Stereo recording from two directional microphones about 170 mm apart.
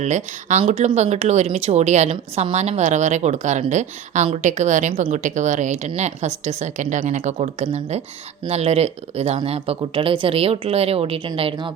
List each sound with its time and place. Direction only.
0.0 s a woman's voice: 45° right (ahead or behind)